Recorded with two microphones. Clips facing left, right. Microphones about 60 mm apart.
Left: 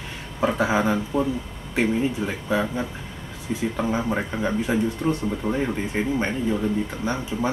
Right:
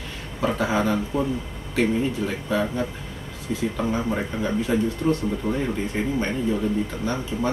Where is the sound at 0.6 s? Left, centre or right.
Centre.